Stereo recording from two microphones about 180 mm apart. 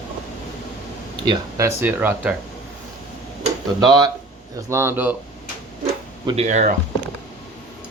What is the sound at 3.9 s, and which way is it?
Speech, 20° right (ahead or behind).